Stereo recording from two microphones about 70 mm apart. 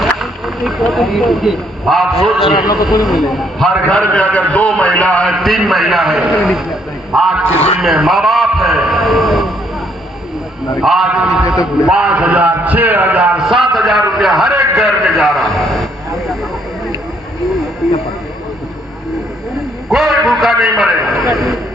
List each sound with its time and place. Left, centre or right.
0.0 s speech: centre
2.6 s a man's voice: left
3.1 s a man's voice: centre
4.1 s a man's voice: centre
5.3 s a man's voice: centre
10.8 s a man's voice: centre; by 13.3 s right
13.3 s a man's voice: centre
14.8 s a sound: centre
19.5 s a man's voice: centre